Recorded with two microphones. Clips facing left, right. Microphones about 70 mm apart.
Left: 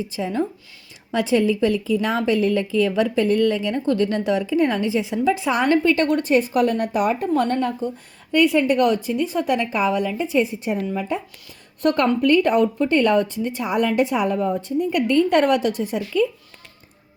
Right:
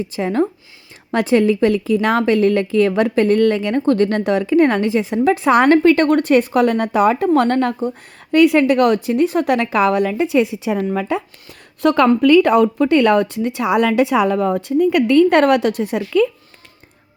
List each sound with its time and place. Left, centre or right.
0.0 s a woman's voice: right
7.3 s speech: right